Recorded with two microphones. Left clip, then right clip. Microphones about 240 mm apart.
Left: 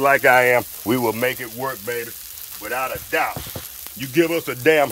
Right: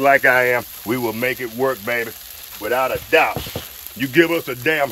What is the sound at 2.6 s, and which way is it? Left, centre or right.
Speech, right.